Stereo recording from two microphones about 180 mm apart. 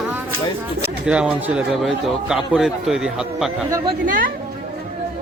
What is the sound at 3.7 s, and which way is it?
Speech, 20° right (ahead or behind).